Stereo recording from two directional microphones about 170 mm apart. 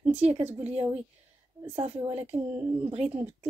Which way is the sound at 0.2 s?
40° right (ahead or behind).